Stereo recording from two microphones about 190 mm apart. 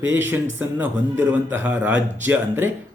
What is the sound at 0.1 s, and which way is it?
A man's voice, 10° right (ahead or behind).